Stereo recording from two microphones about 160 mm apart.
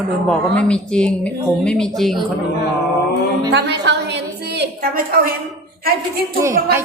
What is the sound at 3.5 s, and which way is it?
A woman's voice, 90° right.